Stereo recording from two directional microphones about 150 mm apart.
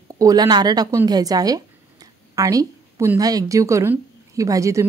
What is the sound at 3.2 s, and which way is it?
A woman's voice, 25° right (ahead or behind).